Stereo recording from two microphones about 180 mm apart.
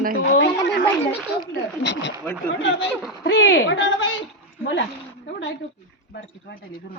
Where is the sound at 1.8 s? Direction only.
80° left.